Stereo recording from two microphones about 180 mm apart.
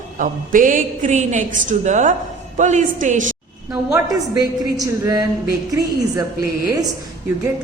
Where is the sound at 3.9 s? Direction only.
20° right (ahead or behind).